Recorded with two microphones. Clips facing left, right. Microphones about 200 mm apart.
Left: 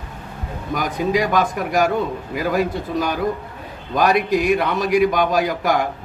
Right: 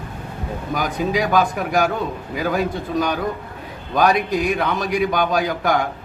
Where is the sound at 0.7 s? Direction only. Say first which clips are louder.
Left 2 dB; centre (ahead or behind).